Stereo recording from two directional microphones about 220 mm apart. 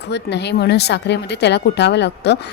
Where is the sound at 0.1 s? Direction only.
50° left (ahead or behind).